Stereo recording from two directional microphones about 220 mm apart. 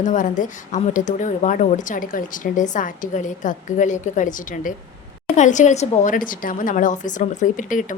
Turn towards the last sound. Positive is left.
turn(degrees=35)  # may be behind; listen again after turning